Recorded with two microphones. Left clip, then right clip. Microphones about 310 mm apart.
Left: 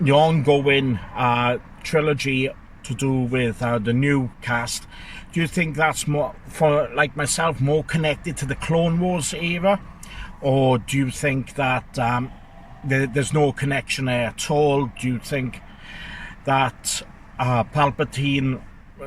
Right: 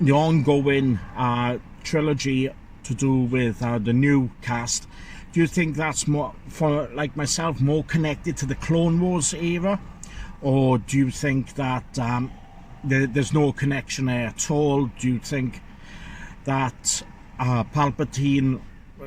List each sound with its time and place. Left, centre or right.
0.0 s speech: left
16.5 s speech: left